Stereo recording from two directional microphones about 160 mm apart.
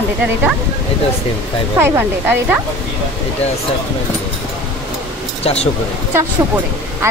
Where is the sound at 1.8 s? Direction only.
10° right (ahead or behind).